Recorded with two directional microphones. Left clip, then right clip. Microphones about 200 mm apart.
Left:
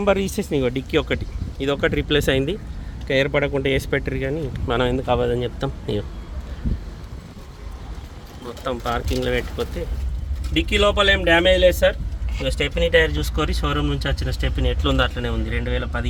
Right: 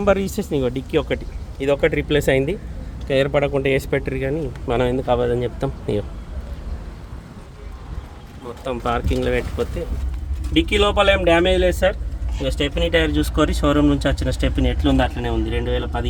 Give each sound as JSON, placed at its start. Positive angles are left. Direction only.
{"t": 0.0, "sound": "speech", "side_deg": 0}
{"t": 1.5, "sound": "speech", "side_deg": -5}
{"t": 8.4, "sound": "speech", "side_deg": -15}
{"t": 12.4, "sound": "speech", "side_deg": 0}
{"t": 13.1, "sound": "speech", "side_deg": -30}
{"t": 14.6, "sound": "speech", "side_deg": -10}